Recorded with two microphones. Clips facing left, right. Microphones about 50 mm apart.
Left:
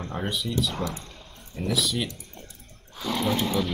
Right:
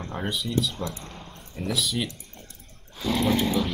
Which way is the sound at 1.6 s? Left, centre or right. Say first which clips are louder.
Left 1 dB; centre.